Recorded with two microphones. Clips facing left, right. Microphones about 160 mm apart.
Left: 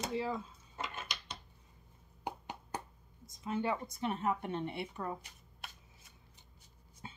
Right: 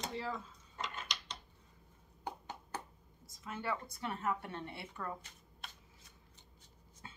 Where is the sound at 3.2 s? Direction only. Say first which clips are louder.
Left 5 dB; 20° left (ahead or behind).